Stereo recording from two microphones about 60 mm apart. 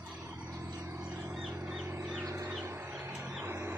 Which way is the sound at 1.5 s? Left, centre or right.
Right.